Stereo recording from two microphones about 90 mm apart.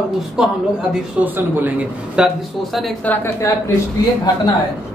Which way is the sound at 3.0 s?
15° left (ahead or behind).